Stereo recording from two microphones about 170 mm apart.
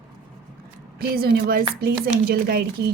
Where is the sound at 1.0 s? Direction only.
65° right (ahead or behind).